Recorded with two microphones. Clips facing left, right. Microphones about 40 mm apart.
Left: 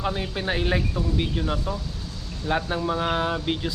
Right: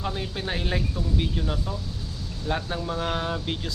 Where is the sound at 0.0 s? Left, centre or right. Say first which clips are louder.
Left 3 dB; centre.